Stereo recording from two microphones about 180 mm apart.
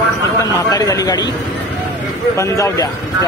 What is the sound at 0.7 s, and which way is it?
Speech, 20° left (ahead or behind).